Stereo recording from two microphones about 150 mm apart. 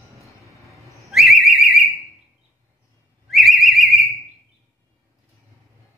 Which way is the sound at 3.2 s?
Centre (ahead or behind).